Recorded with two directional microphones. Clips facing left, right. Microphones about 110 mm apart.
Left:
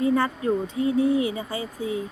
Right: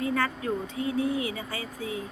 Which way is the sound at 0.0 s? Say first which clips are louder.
Left 6 dB; 25° left (ahead or behind).